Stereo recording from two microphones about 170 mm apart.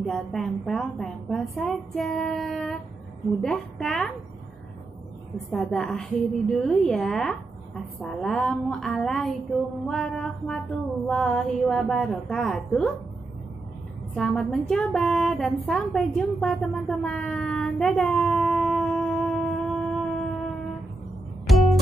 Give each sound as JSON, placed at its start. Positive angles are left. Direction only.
{"t": 0.0, "sound": "a woman's voice", "side_deg": 5}
{"t": 5.5, "sound": "a woman's voice", "side_deg": 0}
{"t": 14.1, "sound": "a woman's voice", "side_deg": 5}
{"t": 21.5, "sound": "music", "side_deg": 0}